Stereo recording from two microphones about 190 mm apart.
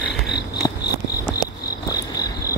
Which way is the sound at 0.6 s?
15° left (ahead or behind).